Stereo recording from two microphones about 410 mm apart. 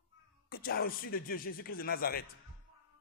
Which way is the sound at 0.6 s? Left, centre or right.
Left.